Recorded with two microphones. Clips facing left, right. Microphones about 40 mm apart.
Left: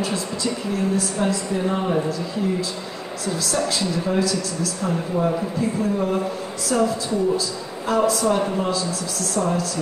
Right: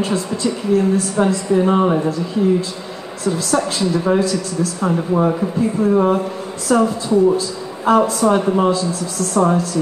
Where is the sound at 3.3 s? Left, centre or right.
Right.